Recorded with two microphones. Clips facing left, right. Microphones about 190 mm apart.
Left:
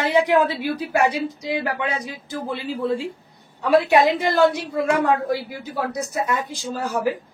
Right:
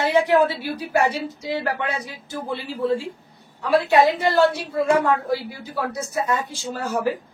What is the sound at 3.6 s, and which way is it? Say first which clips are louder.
A woman's voice: left 1 dB; 15° left (ahead or behind).